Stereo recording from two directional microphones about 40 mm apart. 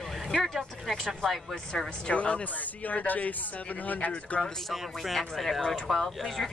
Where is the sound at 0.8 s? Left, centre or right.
Centre.